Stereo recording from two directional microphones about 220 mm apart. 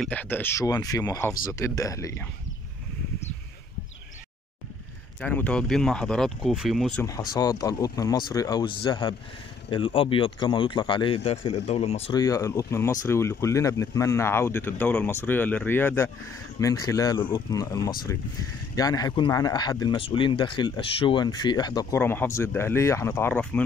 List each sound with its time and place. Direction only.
0.0 s speech: 5° left (ahead or behind)
5.2 s speech: 5° left (ahead or behind)
7.1 s speech: 15° left (ahead or behind)